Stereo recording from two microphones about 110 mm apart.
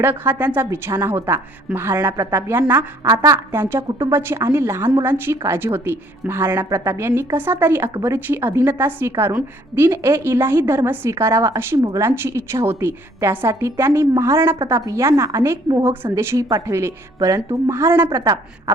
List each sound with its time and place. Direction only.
0.0 s a woman's voice: 15° right (ahead or behind)
3.8 s speech: 40° right (ahead or behind)
4.1 s a woman's voice: 20° right (ahead or behind)